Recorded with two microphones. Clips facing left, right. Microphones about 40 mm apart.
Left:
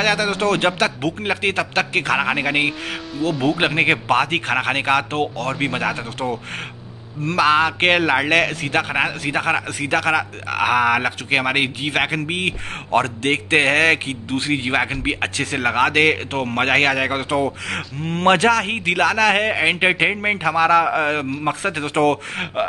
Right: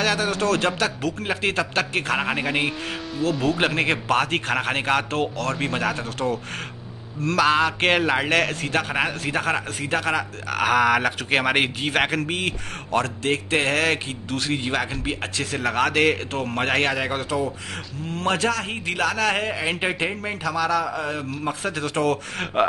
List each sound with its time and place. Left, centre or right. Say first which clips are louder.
0.0 s speech: left 3 dB; left
2.1 s a man's voice: left 4 dB; left
5.2 s speech: left 3 dB; left
7.3 s speech: left 3 dB; left
9.8 s a man's voice: left 5 dB; left
10.5 s a man's voice: left 2 dB; centre
12.9 s speech: left 4 dB; left
14.5 s speech: left 5 dB; left
18.0 s a man's voice: left 7 dB; left
21.7 s speech: left 4 dB; left